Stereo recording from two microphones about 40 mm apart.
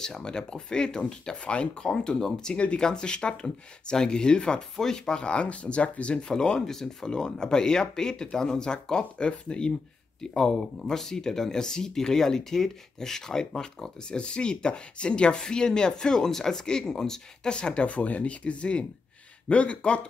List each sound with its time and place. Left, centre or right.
0.0 s speech: centre
6.6 s speech: centre
10.3 s speech: centre; by 20.0 s left